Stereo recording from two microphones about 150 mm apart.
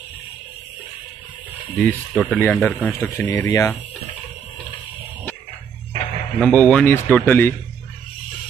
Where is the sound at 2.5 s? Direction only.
5° left (ahead or behind).